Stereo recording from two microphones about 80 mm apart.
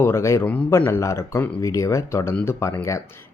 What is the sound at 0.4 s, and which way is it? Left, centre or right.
Speech, centre.